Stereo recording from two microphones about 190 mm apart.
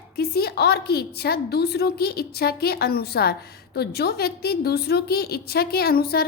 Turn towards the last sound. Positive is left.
turn(degrees=55)  # may be behind; listen again after turning